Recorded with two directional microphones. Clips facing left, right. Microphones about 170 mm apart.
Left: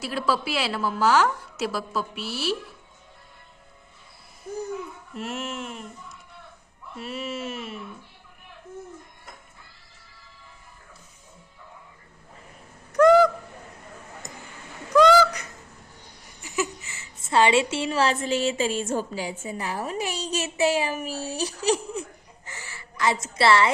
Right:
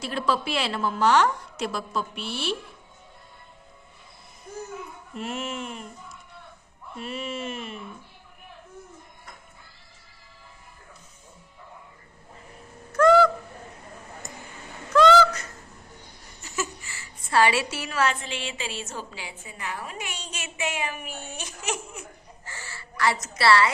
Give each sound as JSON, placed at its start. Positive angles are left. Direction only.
{"t": 0.0, "sound": "a woman's voice", "side_deg": 5}
{"t": 5.1, "sound": "a woman's voice", "side_deg": 0}
{"t": 12.9, "sound": "a sound", "side_deg": 15}
{"t": 14.9, "sound": "honk", "side_deg": 10}
{"t": 16.4, "sound": "a sound", "side_deg": 15}
{"t": 18.2, "sound": "a woman's voice", "side_deg": 40}
{"t": 22.4, "sound": "crow", "side_deg": 15}